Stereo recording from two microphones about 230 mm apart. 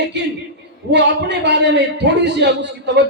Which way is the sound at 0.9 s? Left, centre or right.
Right.